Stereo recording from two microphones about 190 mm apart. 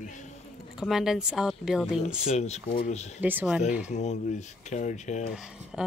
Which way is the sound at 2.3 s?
35° left (ahead or behind).